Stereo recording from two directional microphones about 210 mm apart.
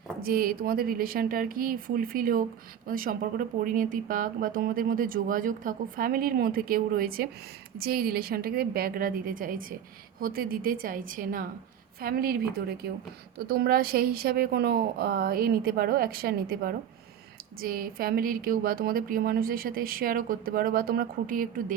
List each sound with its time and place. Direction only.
0.2 s a woman's voice: 45° right (ahead or behind)